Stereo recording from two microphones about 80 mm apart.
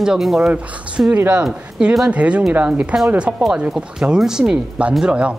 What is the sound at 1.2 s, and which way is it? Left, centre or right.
Speech, right.